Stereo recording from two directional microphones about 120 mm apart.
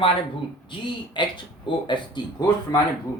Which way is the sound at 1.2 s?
40° left (ahead or behind).